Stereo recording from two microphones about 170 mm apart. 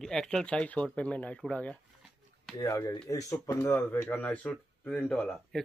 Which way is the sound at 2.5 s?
20° left (ahead or behind).